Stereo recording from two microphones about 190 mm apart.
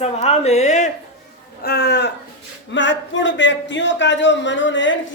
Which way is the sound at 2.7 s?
75° left (ahead or behind).